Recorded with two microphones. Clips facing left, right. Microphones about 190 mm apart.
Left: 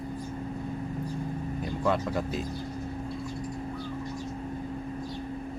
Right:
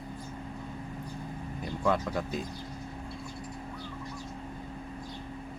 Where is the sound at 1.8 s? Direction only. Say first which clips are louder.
Left 1 dB; centre (ahead or behind).